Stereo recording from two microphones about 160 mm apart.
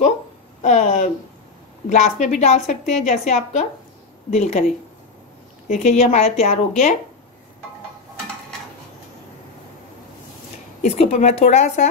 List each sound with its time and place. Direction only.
0.6 s speech: 45° left (ahead or behind)
5.7 s speech: 45° left (ahead or behind)
10.8 s speech: 40° left (ahead or behind)